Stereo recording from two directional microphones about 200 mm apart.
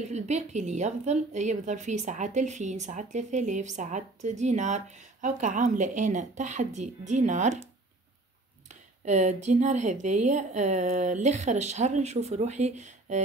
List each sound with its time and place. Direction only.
0.1 s a woman's voice: 35° right (ahead or behind)
8.6 s a woman's voice: 35° right (ahead or behind)